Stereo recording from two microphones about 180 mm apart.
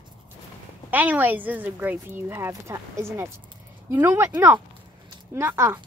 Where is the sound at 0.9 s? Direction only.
10° right (ahead or behind).